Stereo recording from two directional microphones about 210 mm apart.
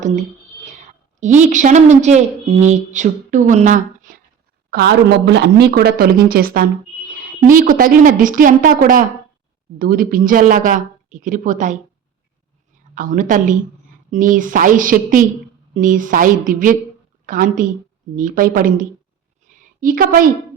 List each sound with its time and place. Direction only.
1.2 s a woman's voice: 35° right (ahead or behind)
4.7 s a woman's voice: 45° right (ahead or behind)
12.9 s a woman's voice: 40° right (ahead or behind)
19.5 s a sound: 40° right (ahead or behind)